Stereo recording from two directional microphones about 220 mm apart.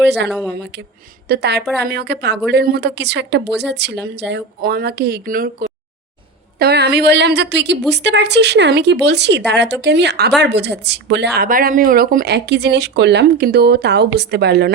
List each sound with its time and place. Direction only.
0.3 s speech: 5° right (ahead or behind)
0.5 s a woman's voice: 50° right (ahead or behind)